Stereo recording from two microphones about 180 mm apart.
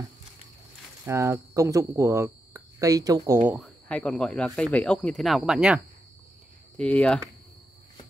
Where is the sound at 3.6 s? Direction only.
5° left (ahead or behind).